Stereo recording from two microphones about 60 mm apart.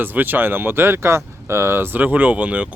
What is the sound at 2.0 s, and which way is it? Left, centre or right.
Speech, right.